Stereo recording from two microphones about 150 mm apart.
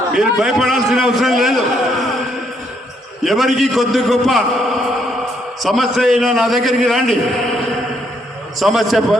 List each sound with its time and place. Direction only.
0.1 s a man's voice: 5° right (ahead or behind)
3.2 s a man's voice: centre (ahead or behind)
8.5 s a man's voice: centre (ahead or behind)